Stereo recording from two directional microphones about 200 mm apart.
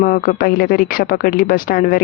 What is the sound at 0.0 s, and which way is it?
Speech, 45° left (ahead or behind).